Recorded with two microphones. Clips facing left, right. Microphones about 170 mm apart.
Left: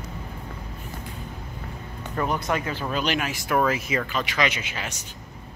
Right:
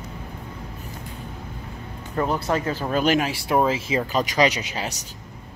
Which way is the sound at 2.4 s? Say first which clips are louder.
Right 3 dB; 35° right (ahead or behind).